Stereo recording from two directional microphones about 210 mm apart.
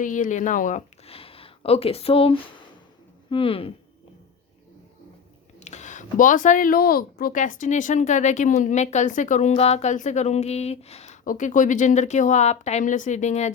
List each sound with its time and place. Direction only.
0.0 s speech: 40° left (ahead or behind)
5.5 s speech: 35° left (ahead or behind)